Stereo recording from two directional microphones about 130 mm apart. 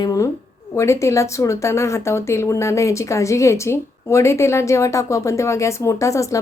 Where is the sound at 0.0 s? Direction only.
25° left (ahead or behind).